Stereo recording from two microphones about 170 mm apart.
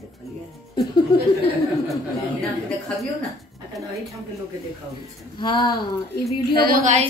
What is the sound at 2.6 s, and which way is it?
Speech, 5° left (ahead or behind).